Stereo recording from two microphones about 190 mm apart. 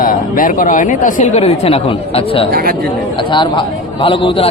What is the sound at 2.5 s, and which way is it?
Speech, 50° right (ahead or behind).